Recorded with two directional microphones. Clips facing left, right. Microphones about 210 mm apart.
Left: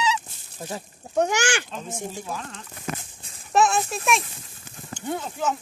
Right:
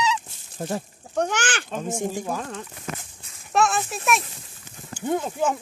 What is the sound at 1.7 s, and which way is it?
Speech, 50° right (ahead or behind).